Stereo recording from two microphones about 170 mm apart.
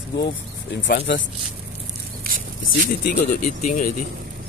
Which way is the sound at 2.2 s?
55° right (ahead or behind).